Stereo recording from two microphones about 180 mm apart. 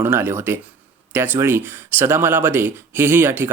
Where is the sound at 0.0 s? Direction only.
15° right (ahead or behind).